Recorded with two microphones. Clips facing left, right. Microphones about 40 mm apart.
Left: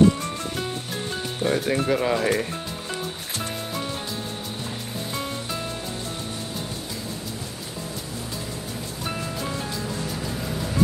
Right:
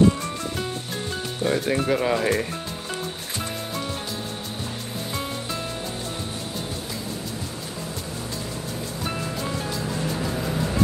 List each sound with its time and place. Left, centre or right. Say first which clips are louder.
1.4 s speech: even; centre
9.0 s music: even; centre
9.8 s music: right 3 dB; centre